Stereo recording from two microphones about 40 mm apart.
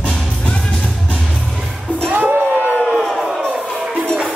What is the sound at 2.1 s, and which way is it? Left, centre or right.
Music, right.